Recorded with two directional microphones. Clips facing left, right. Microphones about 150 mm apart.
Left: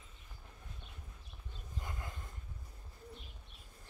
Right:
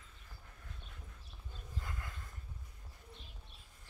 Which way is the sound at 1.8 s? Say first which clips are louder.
Left 2 dB; 25° left (ahead or behind).